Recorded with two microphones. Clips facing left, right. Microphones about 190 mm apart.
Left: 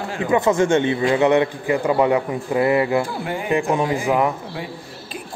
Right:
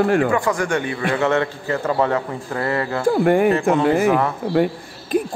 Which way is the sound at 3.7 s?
10° left (ahead or behind).